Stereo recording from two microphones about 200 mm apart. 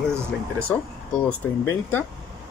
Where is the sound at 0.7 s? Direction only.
5° left (ahead or behind).